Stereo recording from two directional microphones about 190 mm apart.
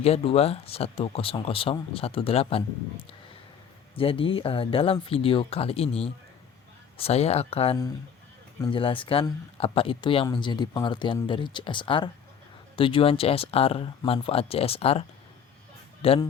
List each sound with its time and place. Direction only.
0.0 s speech: 30° left (ahead or behind)